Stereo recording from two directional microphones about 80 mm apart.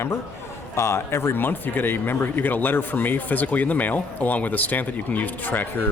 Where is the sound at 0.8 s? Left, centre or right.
Left.